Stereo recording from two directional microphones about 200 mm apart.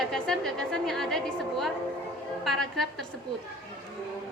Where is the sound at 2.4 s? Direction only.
Centre (ahead or behind).